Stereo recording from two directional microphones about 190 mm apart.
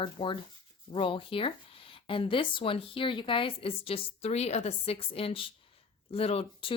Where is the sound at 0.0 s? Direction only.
25° left (ahead or behind).